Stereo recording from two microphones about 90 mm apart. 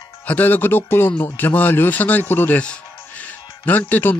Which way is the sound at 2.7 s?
15° left (ahead or behind).